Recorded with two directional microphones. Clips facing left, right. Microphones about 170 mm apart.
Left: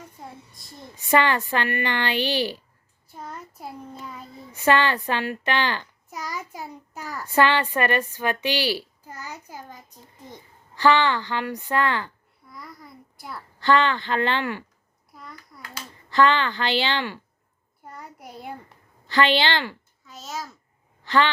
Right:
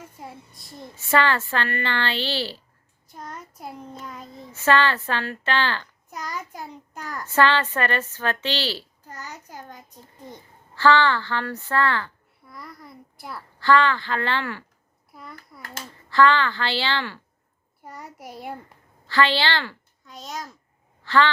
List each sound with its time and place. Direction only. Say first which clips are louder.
0.2 s a woman's voice: right 1 dB; centre (ahead or behind)
0.9 s a child's voice: left 1 dB; 15° left (ahead or behind)
3.1 s a child's voice: even; 5° left (ahead or behind)
4.5 s a child's voice: even; 15° left (ahead or behind)
10.8 s a child's voice: right 1 dB; 15° left (ahead or behind)
12.5 s a child's voice: right 1 dB; centre (ahead or behind)
13.6 s a woman's voice: right 1 dB; 20° left (ahead or behind)
15.1 s hands: right 1 dB; centre (ahead or behind)
16.0 s a woman's voice: right 1 dB; 20° left (ahead or behind)
17.8 s a child's voice: right 2 dB; 5° right (ahead or behind)
19.0 s a woman's voice: left 1 dB; 20° left (ahead or behind)
20.1 s a child's voice: even; 5° left (ahead or behind)
21.0 s speech: right 1 dB; 15° left (ahead or behind)